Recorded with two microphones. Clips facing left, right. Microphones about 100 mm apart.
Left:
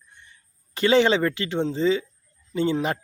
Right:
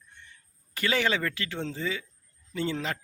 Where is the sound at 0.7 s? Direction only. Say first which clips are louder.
Left 9 dB; 25° left (ahead or behind).